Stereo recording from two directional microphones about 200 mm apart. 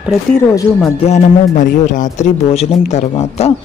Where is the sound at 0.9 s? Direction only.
35° left (ahead or behind).